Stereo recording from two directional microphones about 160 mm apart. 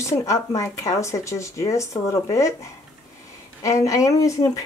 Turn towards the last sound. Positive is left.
turn(degrees=20)  # may be behind; listen again after turning